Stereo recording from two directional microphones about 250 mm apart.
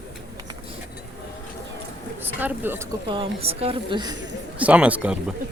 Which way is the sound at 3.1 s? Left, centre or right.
Right.